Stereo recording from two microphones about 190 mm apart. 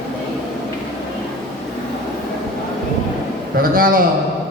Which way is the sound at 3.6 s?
50° right (ahead or behind).